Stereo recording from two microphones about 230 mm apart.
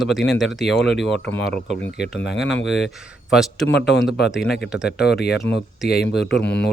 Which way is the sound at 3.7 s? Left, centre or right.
Left.